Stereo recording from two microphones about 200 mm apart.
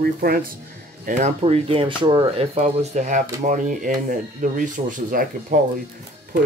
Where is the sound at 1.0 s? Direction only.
30° right (ahead or behind).